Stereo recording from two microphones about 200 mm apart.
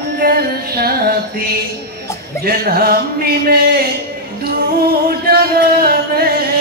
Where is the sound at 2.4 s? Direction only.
50° right (ahead or behind).